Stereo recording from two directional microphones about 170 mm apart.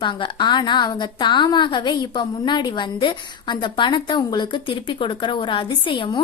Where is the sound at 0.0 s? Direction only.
30° left (ahead or behind).